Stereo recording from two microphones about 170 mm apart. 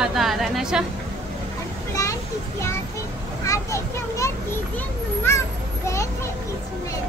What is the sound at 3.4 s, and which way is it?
Children playing, 20° left (ahead or behind).